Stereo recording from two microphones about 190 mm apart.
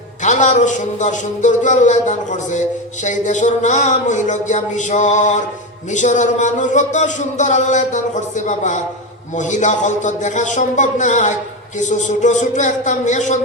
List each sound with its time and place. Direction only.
0.2 s a man's voice: 40° left (ahead or behind)